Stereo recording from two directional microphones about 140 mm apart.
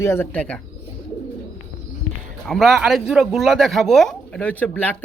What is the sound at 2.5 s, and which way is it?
A woman's voice, centre (ahead or behind).